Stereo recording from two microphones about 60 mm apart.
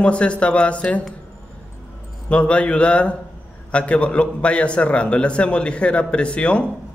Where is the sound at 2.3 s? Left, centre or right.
Centre.